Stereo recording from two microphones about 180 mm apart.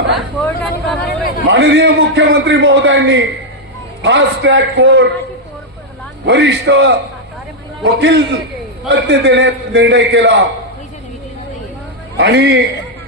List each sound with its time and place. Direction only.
0.1 s speech: centre (ahead or behind)
1.5 s a man's voice: 85° right
6.2 s a man's voice: 80° right
12.2 s a man's voice: 70° right (ahead or behind)